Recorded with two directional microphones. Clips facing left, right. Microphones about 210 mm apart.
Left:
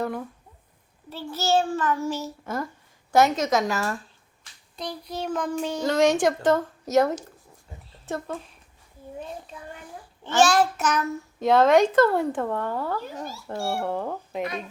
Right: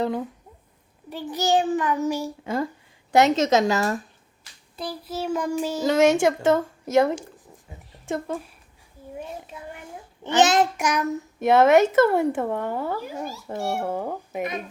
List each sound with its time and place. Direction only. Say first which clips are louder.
0.0 s a woman's voice: right 4 dB; 20° right (ahead or behind)
4.8 s a child's voice: right 2 dB; 5° right (ahead or behind)
10.2 s a child's voice: right 1 dB; 20° right (ahead or behind)